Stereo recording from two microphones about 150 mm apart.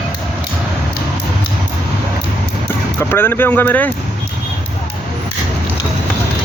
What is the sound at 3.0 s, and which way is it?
Speech, 15° left (ahead or behind).